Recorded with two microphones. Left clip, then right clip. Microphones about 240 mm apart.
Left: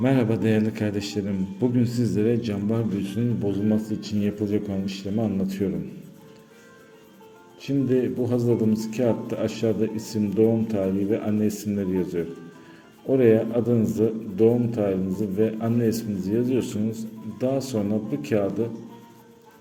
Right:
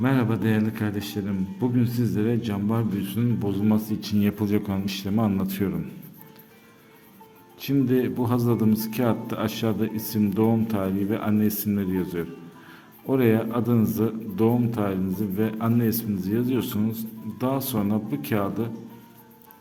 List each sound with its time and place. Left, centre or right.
0.0 s a man's voice: centre
7.6 s speech: right